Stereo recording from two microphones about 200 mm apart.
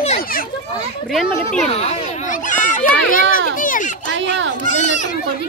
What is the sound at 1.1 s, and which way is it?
Speech, centre (ahead or behind).